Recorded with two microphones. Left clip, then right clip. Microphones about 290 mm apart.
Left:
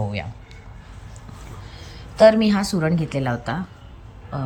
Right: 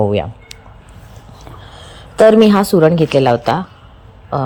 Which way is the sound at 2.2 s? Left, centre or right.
Right.